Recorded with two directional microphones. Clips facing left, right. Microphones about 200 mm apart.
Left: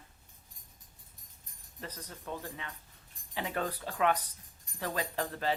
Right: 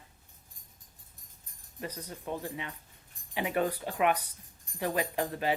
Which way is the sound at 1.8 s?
15° right (ahead or behind).